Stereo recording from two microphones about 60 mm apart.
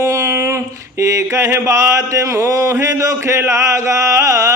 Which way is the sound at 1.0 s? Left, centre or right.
Right.